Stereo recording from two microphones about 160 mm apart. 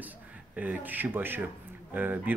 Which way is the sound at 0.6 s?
10° right (ahead or behind).